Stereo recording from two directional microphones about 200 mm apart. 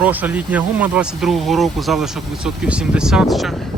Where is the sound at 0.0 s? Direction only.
10° right (ahead or behind).